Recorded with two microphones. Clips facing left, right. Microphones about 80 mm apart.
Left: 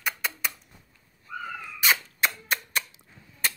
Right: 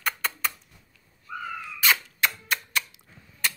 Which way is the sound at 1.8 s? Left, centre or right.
Left.